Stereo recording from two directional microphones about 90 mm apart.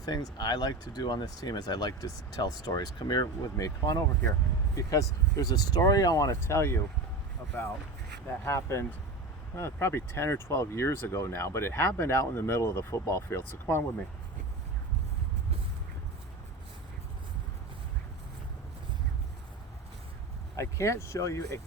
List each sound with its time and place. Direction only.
0.0 s speech: 50° left (ahead or behind)
6.4 s speech: 30° left (ahead or behind)
8.4 s speech: 30° left (ahead or behind)
20.6 s speech: 35° left (ahead or behind)